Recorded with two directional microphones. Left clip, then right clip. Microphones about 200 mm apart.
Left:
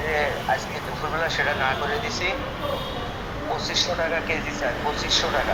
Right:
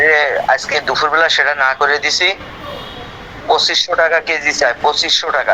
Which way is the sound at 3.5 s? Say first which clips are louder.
Right 12 dB; 45° right (ahead or behind).